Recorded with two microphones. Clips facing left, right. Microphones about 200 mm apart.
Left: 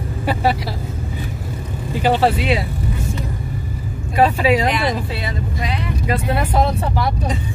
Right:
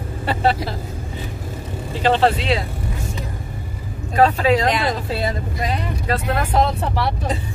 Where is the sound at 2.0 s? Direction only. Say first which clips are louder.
Left 1 dB; 10° left (ahead or behind).